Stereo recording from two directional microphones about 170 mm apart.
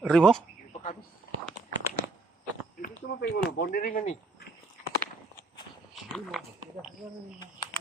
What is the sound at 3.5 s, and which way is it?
Speech, 70° left (ahead or behind).